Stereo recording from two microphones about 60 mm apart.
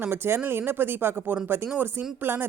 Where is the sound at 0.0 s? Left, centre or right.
Right.